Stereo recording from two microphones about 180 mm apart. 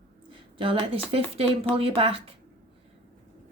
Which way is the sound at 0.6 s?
30° right (ahead or behind).